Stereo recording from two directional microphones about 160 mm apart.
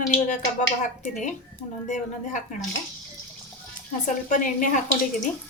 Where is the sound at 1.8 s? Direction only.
50° left (ahead or behind).